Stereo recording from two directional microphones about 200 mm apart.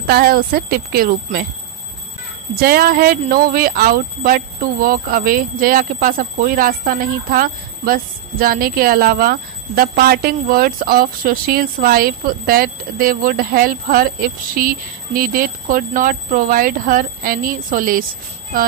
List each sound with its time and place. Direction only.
0.0 s speech: 50° right (ahead or behind)
2.5 s speech: 50° right (ahead or behind)